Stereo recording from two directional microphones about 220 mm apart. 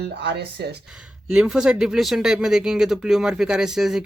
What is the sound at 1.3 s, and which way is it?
Speech, 5° right (ahead or behind).